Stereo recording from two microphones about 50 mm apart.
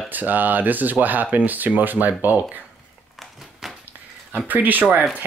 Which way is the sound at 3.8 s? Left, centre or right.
Right.